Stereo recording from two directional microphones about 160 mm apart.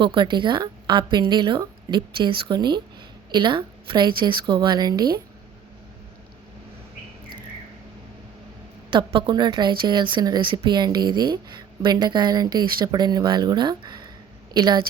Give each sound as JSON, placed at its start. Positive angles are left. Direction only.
{"t": 0.0, "sound": "speech", "side_deg": -30}
{"t": 8.9, "sound": "speech", "side_deg": -30}